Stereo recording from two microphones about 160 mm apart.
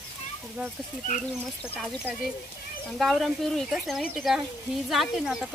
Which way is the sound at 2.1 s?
10° right (ahead or behind).